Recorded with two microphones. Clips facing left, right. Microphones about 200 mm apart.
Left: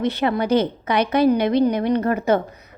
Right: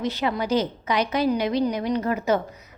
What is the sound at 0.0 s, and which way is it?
A woman's voice, 60° left (ahead or behind).